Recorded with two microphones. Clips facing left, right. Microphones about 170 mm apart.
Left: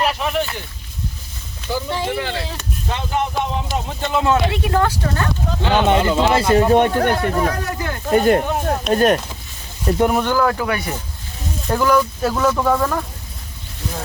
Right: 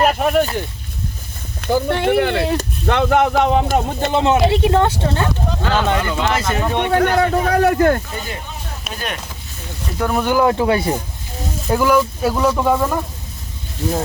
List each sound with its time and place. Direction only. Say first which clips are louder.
0.0 s a sound: right 5 dB; 50° right (ahead or behind)
1.6 s speech: right 6 dB; 60° right (ahead or behind)
4.1 s speech: right 3 dB; 25° right (ahead or behind)
5.6 s speech: left 3 dB; 20° left (ahead or behind)
6.5 s speech: left 6 dB; 40° left (ahead or behind)
7.2 s speech: right 5 dB; 65° right (ahead or behind)
8.1 s speech: left 14 dB; 60° left (ahead or behind)
8.9 s speech: left 12 dB; 45° left (ahead or behind)
10.2 s speech: right 3 dB; 20° right (ahead or behind)
11.7 s speech: right 1 dB; 5° right (ahead or behind)